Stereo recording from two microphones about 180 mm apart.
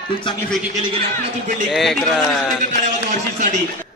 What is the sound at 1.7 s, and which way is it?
Speech, centre (ahead or behind).